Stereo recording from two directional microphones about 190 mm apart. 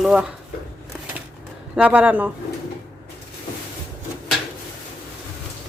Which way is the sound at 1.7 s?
5° right (ahead or behind).